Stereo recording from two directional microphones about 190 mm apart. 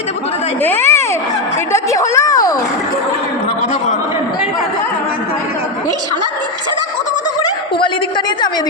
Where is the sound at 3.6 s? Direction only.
40° left (ahead or behind).